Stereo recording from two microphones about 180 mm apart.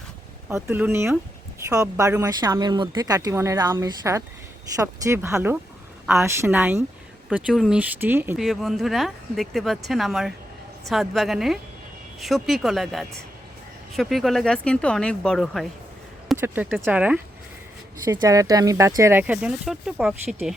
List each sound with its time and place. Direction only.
0.4 s speech: 10° right (ahead or behind)
8.4 s speech: centre (ahead or behind)
18.0 s speech: 20° right (ahead or behind); by 20.6 s 5° right (ahead or behind)